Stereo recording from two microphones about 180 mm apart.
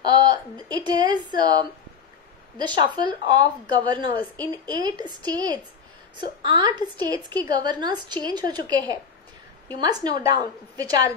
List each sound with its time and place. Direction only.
0.0 s a woman's voice: 25° right (ahead or behind)